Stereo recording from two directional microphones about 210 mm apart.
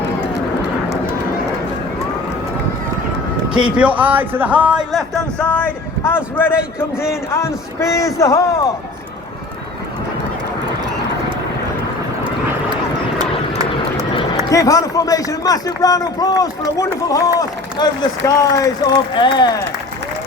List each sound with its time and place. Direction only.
3.8 s speech: 5° right (ahead or behind); by 8.6 s 15° left (ahead or behind)
14.5 s speech: 15° left (ahead or behind)